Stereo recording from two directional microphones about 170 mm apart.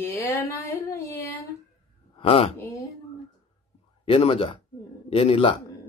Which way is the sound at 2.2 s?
35° left (ahead or behind).